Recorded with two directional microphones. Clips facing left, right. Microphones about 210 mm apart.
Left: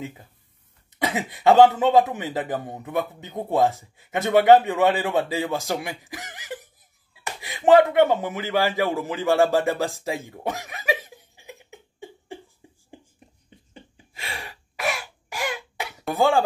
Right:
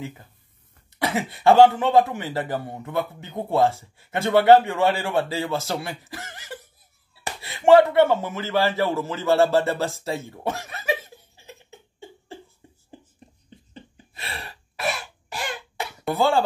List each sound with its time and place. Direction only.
0.9 s speech: 20° left (ahead or behind)
12.6 s a sound: 15° left (ahead or behind)
16.2 s speech: 15° left (ahead or behind)